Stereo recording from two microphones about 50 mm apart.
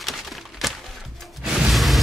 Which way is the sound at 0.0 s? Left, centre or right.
Centre.